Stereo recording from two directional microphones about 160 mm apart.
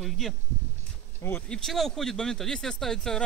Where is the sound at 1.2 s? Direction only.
15° left (ahead or behind).